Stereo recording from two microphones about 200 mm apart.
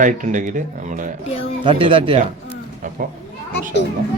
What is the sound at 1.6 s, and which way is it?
Speech, 25° right (ahead or behind).